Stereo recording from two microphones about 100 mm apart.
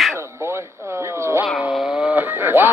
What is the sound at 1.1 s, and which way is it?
Cat, 25° right (ahead or behind).